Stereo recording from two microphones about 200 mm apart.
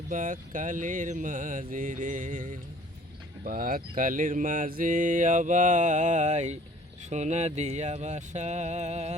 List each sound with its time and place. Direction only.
0.1 s mantra: 40° right (ahead or behind)